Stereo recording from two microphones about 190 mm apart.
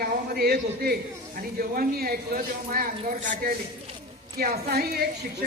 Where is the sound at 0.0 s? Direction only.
55° right (ahead or behind).